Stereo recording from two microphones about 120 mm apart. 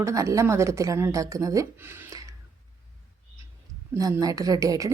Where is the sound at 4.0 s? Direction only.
30° right (ahead or behind).